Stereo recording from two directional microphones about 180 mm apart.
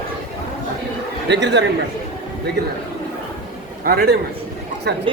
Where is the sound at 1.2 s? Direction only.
75° right (ahead or behind).